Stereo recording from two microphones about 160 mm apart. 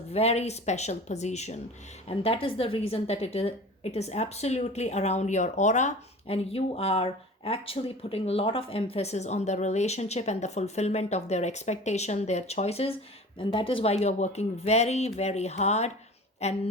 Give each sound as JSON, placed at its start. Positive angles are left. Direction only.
{"t": 0.1, "sound": "a woman's voice", "side_deg": 40}